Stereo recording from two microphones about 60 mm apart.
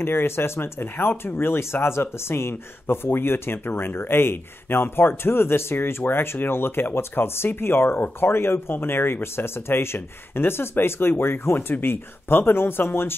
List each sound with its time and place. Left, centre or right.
0.0 s speech: left